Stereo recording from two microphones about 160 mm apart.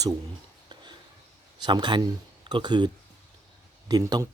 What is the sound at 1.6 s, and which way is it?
Speech, 30° right (ahead or behind).